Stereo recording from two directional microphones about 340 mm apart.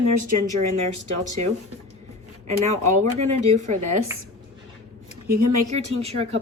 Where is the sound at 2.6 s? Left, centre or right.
Right.